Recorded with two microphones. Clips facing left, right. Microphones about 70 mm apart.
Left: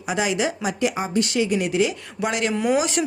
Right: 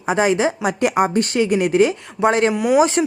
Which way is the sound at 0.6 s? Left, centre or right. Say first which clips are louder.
Right 6 dB; right.